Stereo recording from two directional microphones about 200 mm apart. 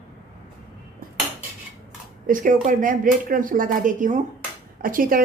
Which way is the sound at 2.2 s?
40° right (ahead or behind).